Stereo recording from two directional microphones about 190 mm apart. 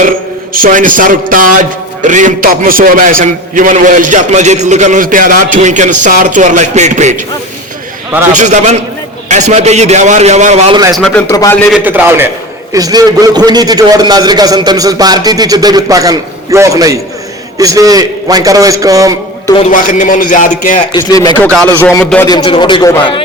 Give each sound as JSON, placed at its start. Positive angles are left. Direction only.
{"t": 0.5, "sound": "a man's voice", "side_deg": -45}
{"t": 8.3, "sound": "a man's voice", "side_deg": -40}
{"t": 10.9, "sound": "speech", "side_deg": 5}
{"t": 11.3, "sound": "speech", "side_deg": 20}
{"t": 11.7, "sound": "a man's voice", "side_deg": -10}
{"t": 19.7, "sound": "speech", "side_deg": 45}
{"t": 20.9, "sound": "speech", "side_deg": 20}
{"t": 21.4, "sound": "speech", "side_deg": 5}
{"t": 22.4, "sound": "speech", "side_deg": 25}